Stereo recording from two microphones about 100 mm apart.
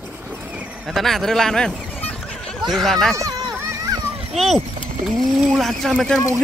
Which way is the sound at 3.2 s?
35° right (ahead or behind).